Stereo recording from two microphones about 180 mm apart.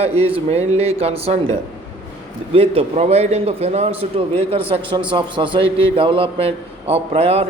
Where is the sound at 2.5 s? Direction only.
30° right (ahead or behind).